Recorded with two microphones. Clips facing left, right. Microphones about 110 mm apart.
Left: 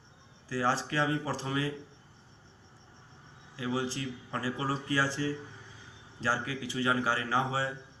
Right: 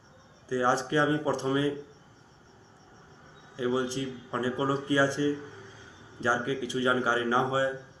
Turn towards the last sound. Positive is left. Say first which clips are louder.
# right 5 dB
turn(degrees=-15)  # may be behind; listen again after turning